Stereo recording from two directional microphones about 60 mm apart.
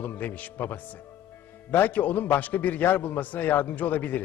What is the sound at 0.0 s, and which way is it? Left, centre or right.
A man's voice, left.